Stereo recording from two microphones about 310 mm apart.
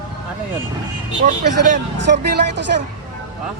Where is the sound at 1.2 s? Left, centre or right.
Right.